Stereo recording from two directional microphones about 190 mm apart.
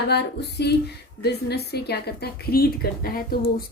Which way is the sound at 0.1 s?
60° left (ahead or behind).